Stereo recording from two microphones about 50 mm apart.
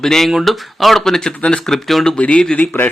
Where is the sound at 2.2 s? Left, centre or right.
Left.